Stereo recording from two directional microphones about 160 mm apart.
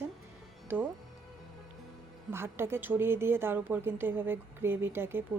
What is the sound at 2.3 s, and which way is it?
A woman's voice, 15° right (ahead or behind).